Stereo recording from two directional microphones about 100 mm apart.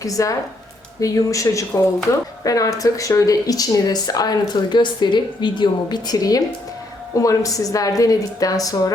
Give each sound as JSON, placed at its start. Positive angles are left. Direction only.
{"t": 0.0, "sound": "speech", "side_deg": 35}